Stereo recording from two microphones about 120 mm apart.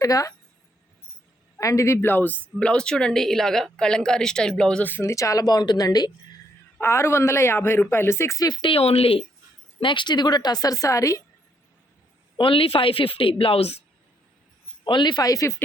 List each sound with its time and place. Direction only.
0.0 s a woman's voice: 30° left (ahead or behind)
1.5 s speech: 25° left (ahead or behind)
6.7 s speech: 20° left (ahead or behind); by 9.2 s 55° left (ahead or behind)
9.8 s a woman's voice: 40° left (ahead or behind); by 11.2 s 25° left (ahead or behind)
12.4 s a woman's voice: 50° left (ahead or behind)
14.8 s a woman's voice: 40° left (ahead or behind)